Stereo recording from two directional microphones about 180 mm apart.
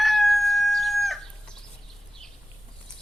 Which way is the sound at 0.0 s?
Centre (ahead or behind).